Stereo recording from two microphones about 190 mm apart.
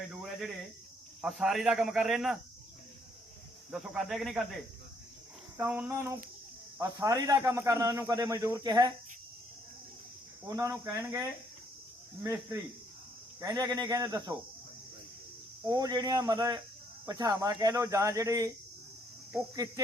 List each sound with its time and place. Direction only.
0.1 s cricket: centre (ahead or behind)
1.2 s speech: centre (ahead or behind)
3.7 s speech: centre (ahead or behind)
5.5 s a man's voice: 10° right (ahead or behind)
10.5 s a man's voice: 15° right (ahead or behind)
15.6 s a man's voice: 20° right (ahead or behind)